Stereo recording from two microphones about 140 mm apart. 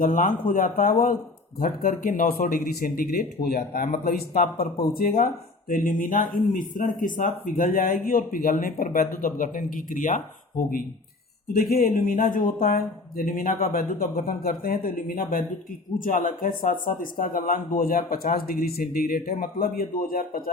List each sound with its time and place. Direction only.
0.0 s speech: 70° left (ahead or behind)
11.7 s speech: 90° left; by 13.5 s 75° left (ahead or behind)
13.6 s speech: 90° left